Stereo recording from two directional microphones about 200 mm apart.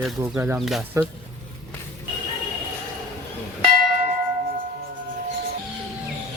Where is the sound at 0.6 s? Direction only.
Centre (ahead or behind).